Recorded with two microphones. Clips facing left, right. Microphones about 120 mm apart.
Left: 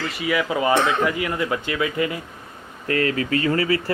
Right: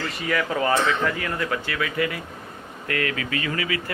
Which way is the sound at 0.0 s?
5° left (ahead or behind).